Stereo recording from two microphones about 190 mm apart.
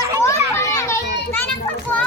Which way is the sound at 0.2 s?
15° left (ahead or behind).